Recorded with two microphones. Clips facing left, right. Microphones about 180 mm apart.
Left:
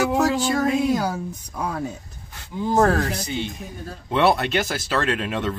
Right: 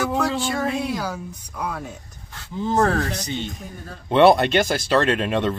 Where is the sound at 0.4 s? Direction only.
40° left (ahead or behind).